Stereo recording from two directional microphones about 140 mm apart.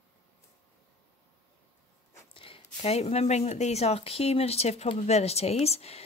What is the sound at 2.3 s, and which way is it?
Speech, 40° left (ahead or behind).